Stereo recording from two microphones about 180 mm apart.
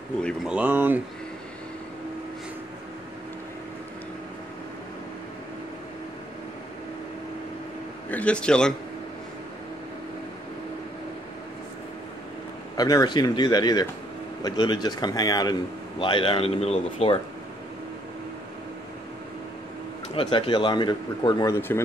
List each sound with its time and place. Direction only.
0.2 s speech: 5° left (ahead or behind)
8.1 s a man's voice: 5° left (ahead or behind)
12.7 s speech: 20° left (ahead or behind)
20.2 s speech: 30° left (ahead or behind)
21.5 s speech: 10° left (ahead or behind)